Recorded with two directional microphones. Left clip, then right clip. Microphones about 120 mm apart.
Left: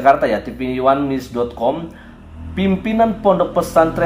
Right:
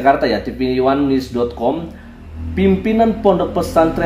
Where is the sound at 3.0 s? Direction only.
10° right (ahead or behind).